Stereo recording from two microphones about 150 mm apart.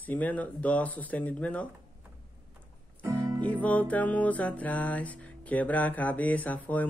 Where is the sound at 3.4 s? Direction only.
10° left (ahead or behind).